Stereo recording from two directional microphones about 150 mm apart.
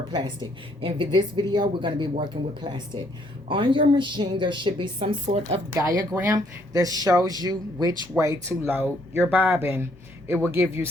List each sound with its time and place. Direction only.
0.1 s a woman's voice: 30° right (ahead or behind)
5.7 s speech: 20° right (ahead or behind)